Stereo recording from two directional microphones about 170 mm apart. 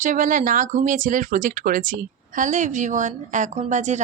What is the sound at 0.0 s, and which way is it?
A woman's voice, 50° right (ahead or behind).